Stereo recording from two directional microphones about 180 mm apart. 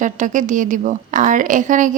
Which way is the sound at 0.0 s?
45° right (ahead or behind).